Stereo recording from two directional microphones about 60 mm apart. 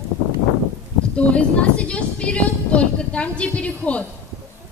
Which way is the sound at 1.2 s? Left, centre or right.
Left.